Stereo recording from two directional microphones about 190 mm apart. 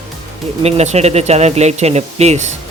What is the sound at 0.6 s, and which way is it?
Speech, 35° right (ahead or behind).